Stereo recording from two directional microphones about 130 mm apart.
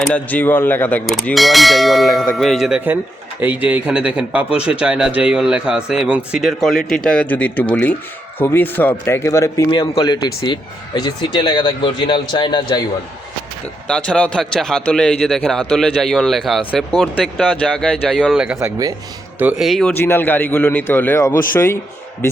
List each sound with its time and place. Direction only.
0.0 s a man's voice: 10° left (ahead or behind)
1.3 s a man's voice: centre (ahead or behind); by 9.7 s 25° left (ahead or behind)
9.7 s speech: 35° left (ahead or behind)
13.8 s a man's voice: 5° left (ahead or behind)
18.1 s a man's voice: 5° right (ahead or behind)
18.6 s speech: 30° right (ahead or behind)
19.4 s a man's voice: 10° right (ahead or behind)
19.6 s a man's voice: centre (ahead or behind)
20.0 s a man's voice: 15° left (ahead or behind)